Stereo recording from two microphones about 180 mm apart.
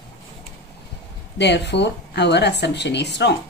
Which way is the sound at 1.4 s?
70° left (ahead or behind).